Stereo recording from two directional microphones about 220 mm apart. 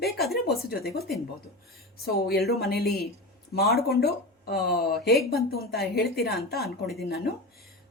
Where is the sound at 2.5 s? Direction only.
45° left (ahead or behind).